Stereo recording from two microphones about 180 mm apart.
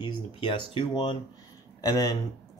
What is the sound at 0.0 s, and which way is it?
Speech, 25° left (ahead or behind).